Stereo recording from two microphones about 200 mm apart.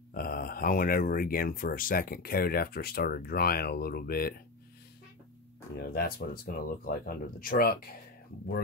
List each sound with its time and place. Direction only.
0.1 s speech: 45° left (ahead or behind)
5.8 s speech: 50° left (ahead or behind)